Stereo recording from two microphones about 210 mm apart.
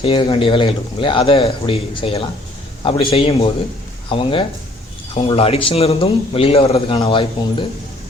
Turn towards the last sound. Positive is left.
turn(degrees=25)  # may be behind; listen again after turning